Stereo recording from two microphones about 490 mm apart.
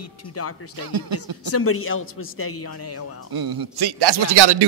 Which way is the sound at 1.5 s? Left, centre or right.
Left.